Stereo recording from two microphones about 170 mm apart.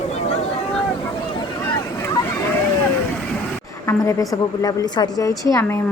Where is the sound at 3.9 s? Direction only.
20° left (ahead or behind).